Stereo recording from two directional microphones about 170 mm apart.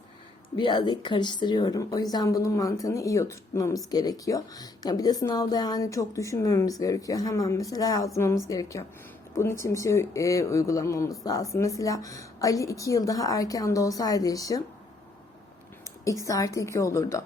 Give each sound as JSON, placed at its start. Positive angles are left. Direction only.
{"t": 0.5, "sound": "speech", "side_deg": 25}
{"t": 16.0, "sound": "speech", "side_deg": 20}